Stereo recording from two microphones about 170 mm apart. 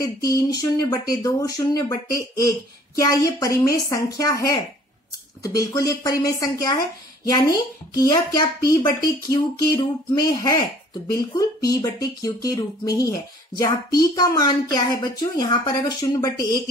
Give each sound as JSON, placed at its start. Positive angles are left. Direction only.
{"t": 0.0, "sound": "speech", "side_deg": 20}
{"t": 14.1, "sound": "speech", "side_deg": 25}